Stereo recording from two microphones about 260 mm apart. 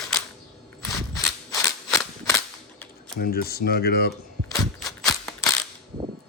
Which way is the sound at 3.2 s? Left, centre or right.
Left.